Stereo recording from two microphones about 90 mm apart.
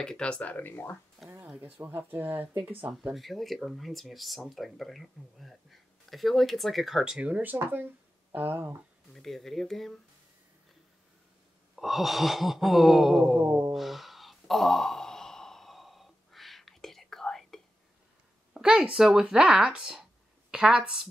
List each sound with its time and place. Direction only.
0.0 s speech: 10° left (ahead or behind)
1.6 s speech: 20° right (ahead or behind)
2.9 s speech: 5° right (ahead or behind); by 8.7 s 20° right (ahead or behind)
9.1 s speech: 5° left (ahead or behind)
11.7 s a sound: centre (ahead or behind)
18.5 s speech: 10° right (ahead or behind)